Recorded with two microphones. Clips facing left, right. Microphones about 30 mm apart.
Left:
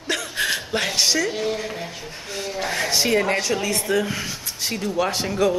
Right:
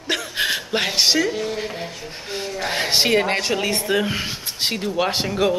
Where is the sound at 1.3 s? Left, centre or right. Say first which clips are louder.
Left 1 dB; centre.